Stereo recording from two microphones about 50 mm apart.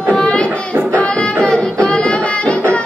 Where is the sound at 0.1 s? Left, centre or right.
Left.